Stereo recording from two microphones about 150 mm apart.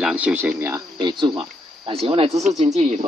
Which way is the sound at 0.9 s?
30° right (ahead or behind).